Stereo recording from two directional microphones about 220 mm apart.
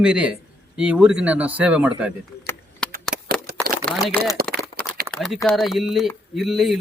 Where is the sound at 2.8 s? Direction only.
5° left (ahead or behind).